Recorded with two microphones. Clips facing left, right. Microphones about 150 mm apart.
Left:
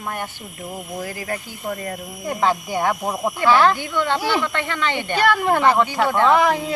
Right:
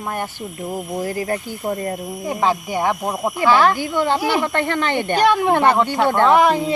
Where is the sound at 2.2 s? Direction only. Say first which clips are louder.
Right 1 dB; 10° right (ahead or behind).